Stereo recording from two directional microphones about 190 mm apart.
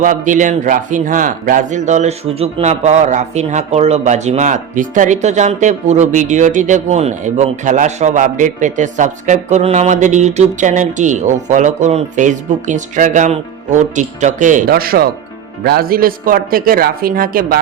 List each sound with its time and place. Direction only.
0.0 s a man's voice: 45° right (ahead or behind)